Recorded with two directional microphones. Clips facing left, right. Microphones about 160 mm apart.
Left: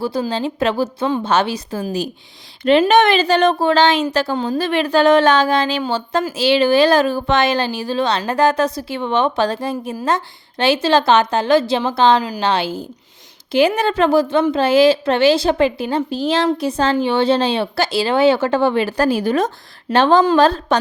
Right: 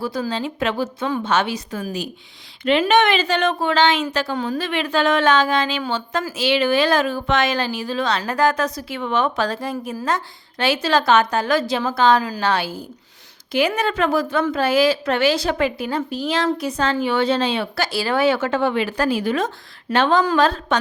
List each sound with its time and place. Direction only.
0.0 s a woman's voice: 30° left (ahead or behind)